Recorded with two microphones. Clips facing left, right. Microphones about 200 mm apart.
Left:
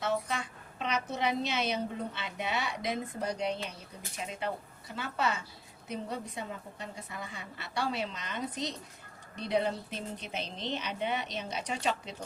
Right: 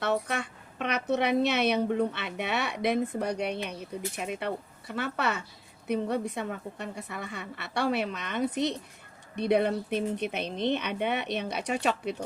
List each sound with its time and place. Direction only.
0.0 s a woman's voice: 65° right (ahead or behind)